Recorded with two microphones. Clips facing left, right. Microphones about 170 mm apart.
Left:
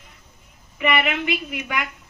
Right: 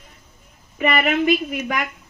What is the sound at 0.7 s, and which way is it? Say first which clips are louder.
A woman's voice: right 3 dB; 40° right (ahead or behind).